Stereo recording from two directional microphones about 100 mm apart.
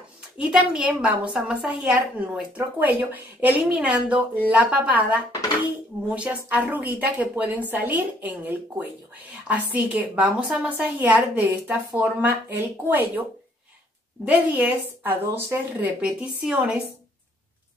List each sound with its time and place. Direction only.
0.4 s a woman's voice: 10° right (ahead or behind)
14.2 s a woman's voice: 15° right (ahead or behind)